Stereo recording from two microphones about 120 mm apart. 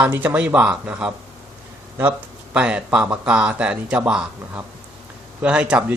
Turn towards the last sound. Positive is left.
turn(degrees=-10)  # may be behind; listen again after turning